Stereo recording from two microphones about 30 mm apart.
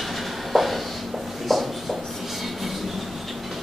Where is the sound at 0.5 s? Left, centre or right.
Centre.